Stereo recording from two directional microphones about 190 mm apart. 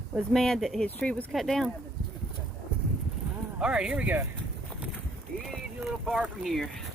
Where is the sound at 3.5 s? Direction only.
5° right (ahead or behind).